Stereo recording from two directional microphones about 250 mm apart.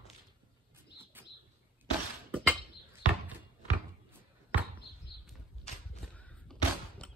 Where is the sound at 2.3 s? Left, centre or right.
Centre.